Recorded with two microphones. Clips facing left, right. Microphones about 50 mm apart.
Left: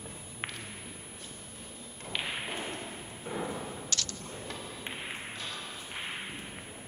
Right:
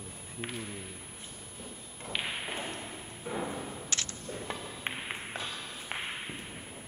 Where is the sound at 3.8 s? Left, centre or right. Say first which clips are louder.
Even; right.